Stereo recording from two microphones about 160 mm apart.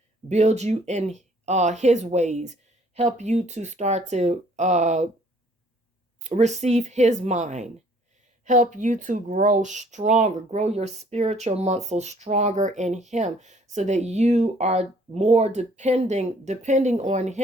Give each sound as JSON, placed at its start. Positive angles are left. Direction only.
{"t": 0.3, "sound": "speech", "side_deg": -45}
{"t": 6.2, "sound": "speech", "side_deg": -45}